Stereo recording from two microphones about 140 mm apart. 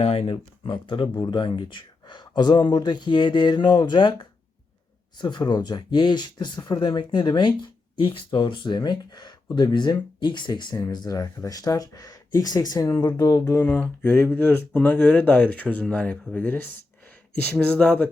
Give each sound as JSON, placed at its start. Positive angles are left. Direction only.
{"t": 0.0, "sound": "speech", "side_deg": 45}
{"t": 1.0, "sound": "speech", "side_deg": 25}
{"t": 1.3, "sound": "speech", "side_deg": 35}
{"t": 17.7, "sound": "speech", "side_deg": 10}